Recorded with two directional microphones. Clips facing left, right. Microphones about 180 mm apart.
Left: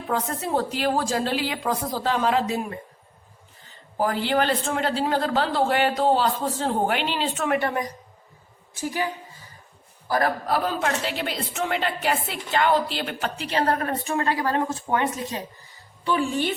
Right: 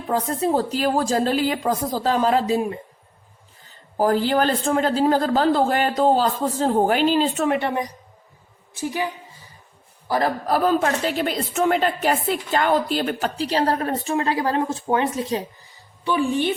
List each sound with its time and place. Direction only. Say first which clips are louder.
0.1 s a woman's voice: right 4 dB; 35° right (ahead or behind)
3.9 s a woman's voice: right 4 dB; 40° right (ahead or behind)
10.1 s a man's voice: right 2 dB; 25° right (ahead or behind)
10.4 s a woman's voice: right 5 dB; 45° right (ahead or behind); by 15.4 s 25° right (ahead or behind)